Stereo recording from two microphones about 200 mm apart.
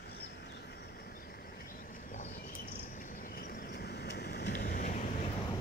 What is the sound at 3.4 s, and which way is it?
Vehicle, 50° left (ahead or behind).